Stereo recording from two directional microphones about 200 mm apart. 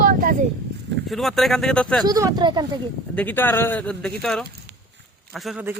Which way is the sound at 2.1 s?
20° right (ahead or behind).